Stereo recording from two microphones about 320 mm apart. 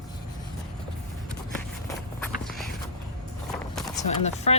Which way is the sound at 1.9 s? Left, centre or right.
Centre.